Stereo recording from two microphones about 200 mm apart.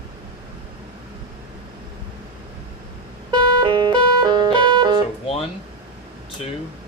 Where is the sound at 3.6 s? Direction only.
25° right (ahead or behind).